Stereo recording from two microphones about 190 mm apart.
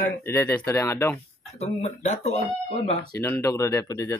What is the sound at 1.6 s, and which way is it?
A man's voice, 35° left (ahead or behind).